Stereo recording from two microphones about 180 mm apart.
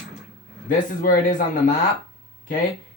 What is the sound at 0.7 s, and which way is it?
Speech, 50° left (ahead or behind).